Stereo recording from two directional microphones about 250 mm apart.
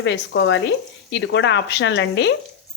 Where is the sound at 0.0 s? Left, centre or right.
Left.